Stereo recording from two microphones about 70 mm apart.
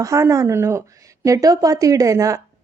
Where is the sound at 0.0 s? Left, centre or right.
Right.